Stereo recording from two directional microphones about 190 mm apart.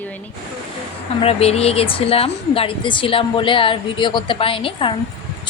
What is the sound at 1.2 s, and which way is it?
Speech, 30° left (ahead or behind).